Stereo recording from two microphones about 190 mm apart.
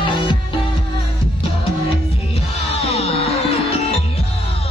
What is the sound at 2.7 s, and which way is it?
Music, 30° left (ahead or behind).